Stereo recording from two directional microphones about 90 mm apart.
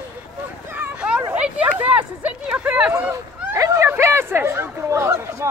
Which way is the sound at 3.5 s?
30° right (ahead or behind).